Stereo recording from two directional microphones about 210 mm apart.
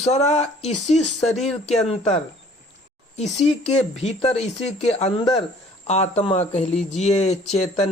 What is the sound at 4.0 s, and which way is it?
Speech, 30° left (ahead or behind).